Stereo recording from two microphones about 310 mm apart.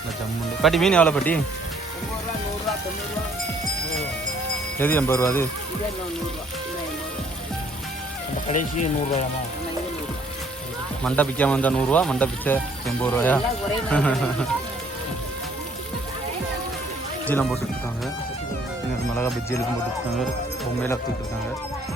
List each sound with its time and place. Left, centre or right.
0.6 s speech: centre
4.8 s speech: centre
8.5 s speech: centre
11.0 s speech: centre
17.2 s speech: centre
19.1 s speech: centre